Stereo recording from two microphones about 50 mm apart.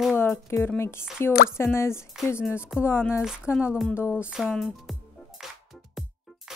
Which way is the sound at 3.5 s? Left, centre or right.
Left.